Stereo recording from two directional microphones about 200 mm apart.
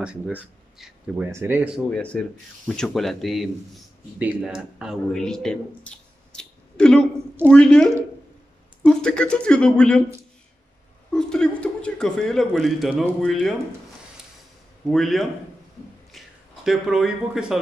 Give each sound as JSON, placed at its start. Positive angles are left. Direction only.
{"t": 0.0, "sound": "speech", "side_deg": -5}
{"t": 1.9, "sound": "speech", "side_deg": 5}
{"t": 11.1, "sound": "speech", "side_deg": 5}
{"t": 14.9, "sound": "speech", "side_deg": 0}
{"t": 16.1, "sound": "a sound", "side_deg": 0}